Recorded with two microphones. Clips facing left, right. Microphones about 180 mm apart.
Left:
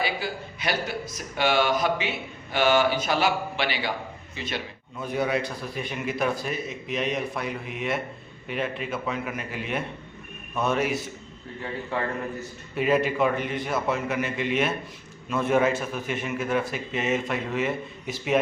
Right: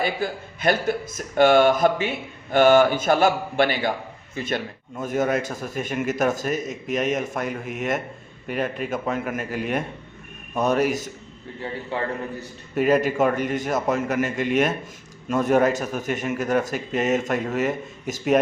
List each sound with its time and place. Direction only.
0.0 s a man's voice: 50° right (ahead or behind)
12.4 s speech: 40° right (ahead or behind)